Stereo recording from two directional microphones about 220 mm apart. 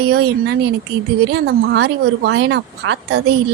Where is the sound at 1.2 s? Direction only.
50° right (ahead or behind).